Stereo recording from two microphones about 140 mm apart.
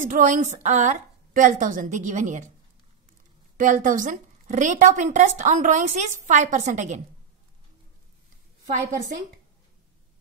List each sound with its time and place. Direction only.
0.1 s a woman's voice: 65° right (ahead or behind)
3.5 s a woman's voice: 70° right (ahead or behind)